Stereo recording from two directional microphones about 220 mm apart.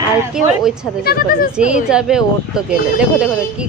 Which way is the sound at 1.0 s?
45° left (ahead or behind).